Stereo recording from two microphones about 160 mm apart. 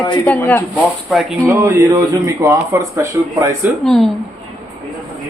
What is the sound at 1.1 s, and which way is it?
Speech, centre (ahead or behind).